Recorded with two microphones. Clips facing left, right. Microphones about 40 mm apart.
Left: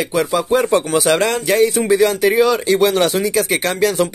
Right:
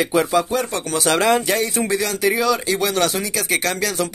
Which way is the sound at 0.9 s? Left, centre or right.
Centre.